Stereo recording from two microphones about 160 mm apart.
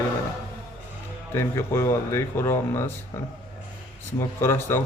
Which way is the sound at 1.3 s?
15° left (ahead or behind).